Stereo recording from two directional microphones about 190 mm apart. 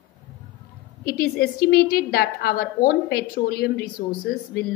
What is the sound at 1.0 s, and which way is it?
A woman's voice, 50° left (ahead or behind).